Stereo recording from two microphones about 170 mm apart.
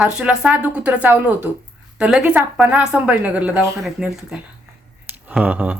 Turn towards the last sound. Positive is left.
turn(degrees=-10)  # may be behind; listen again after turning